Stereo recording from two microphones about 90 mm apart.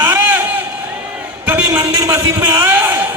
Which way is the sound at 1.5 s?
15° right (ahead or behind).